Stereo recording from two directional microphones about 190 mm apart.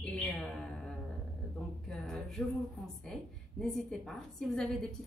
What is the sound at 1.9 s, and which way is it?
A woman's voice, centre (ahead or behind).